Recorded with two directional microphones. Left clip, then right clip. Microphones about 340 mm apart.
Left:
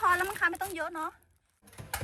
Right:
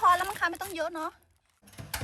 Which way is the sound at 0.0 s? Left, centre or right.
Centre.